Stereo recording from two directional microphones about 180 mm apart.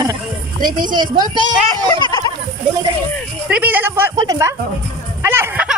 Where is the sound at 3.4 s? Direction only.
5° right (ahead or behind).